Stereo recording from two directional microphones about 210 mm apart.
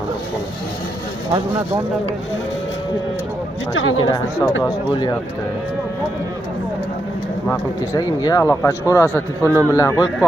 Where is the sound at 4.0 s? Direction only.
20° left (ahead or behind).